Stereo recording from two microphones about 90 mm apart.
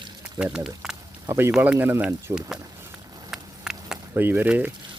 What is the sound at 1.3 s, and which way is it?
Speech, 30° right (ahead or behind).